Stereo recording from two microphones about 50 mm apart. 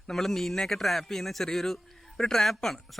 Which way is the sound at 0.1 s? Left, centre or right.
Centre.